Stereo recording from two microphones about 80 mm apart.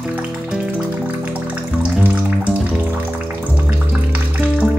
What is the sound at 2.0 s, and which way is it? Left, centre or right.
Music, right.